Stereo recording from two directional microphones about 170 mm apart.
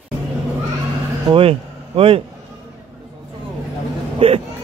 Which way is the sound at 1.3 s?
35° right (ahead or behind).